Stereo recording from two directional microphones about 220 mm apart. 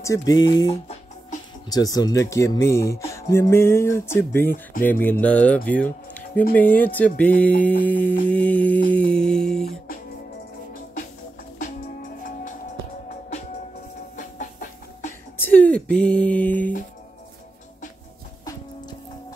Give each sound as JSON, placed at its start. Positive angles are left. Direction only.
{"t": 0.0, "sound": "speech", "side_deg": 15}
{"t": 8.9, "sound": "music", "side_deg": 5}
{"t": 11.5, "sound": "music", "side_deg": 35}
{"t": 14.1, "sound": "music", "side_deg": 35}
{"t": 15.3, "sound": "a sound", "side_deg": 10}
{"t": 18.4, "sound": "music", "side_deg": 15}